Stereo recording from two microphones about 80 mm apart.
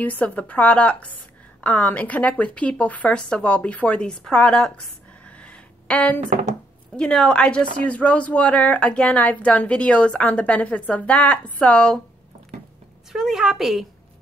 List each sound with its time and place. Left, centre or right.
0.0 s speech: centre
13.1 s a woman's voice: centre